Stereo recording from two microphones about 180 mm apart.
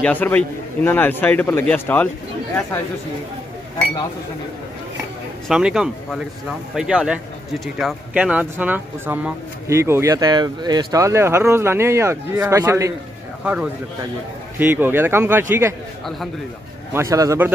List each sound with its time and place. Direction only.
0.0 s a man's voice: 10° left (ahead or behind)
5.5 s speech: 5° right (ahead or behind)
13.4 s speech: 5° right (ahead or behind)
16.9 s speech: 15° right (ahead or behind)